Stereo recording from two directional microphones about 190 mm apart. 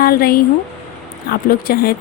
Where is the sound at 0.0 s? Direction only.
50° left (ahead or behind).